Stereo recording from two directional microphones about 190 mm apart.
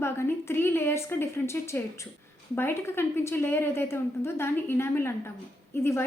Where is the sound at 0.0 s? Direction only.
15° left (ahead or behind).